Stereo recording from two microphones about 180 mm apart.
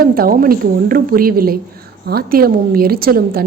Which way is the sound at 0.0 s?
55° right (ahead or behind).